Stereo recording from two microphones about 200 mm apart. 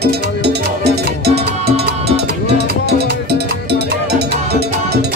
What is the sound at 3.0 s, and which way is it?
Music, 55° right (ahead or behind).